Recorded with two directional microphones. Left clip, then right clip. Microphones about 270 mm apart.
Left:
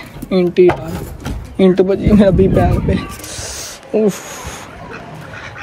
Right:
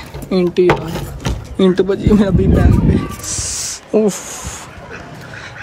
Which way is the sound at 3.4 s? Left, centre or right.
Centre.